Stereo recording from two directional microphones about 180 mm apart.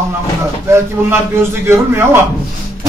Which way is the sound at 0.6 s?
15° right (ahead or behind).